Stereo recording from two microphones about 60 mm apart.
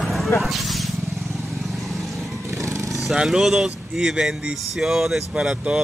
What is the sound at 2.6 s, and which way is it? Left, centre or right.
Vehicle, right.